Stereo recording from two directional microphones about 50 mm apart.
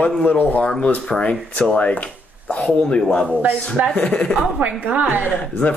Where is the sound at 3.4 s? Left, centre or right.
Right.